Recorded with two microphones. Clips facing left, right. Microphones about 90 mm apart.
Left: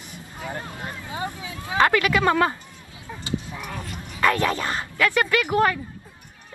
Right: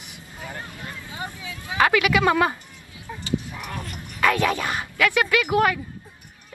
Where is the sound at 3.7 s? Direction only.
20° left (ahead or behind).